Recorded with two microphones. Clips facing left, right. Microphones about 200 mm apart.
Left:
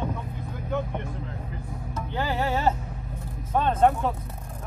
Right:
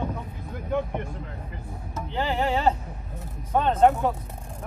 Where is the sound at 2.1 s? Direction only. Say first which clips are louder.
Right 2 dB; 20° right (ahead or behind).